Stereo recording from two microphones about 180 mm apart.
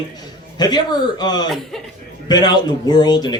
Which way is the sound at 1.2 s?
20° left (ahead or behind).